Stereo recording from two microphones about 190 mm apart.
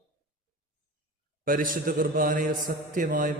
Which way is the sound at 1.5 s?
45° right (ahead or behind).